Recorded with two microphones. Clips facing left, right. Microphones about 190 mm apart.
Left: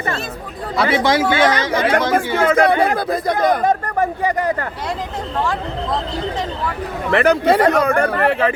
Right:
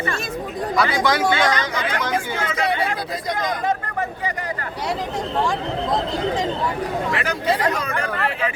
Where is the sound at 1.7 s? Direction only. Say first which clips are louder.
Left 7 dB; 55° left (ahead or behind).